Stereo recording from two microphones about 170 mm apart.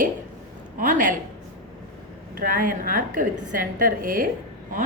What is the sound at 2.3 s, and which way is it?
A woman's voice, 55° right (ahead or behind).